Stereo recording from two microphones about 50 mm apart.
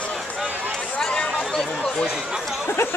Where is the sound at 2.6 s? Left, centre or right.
Left.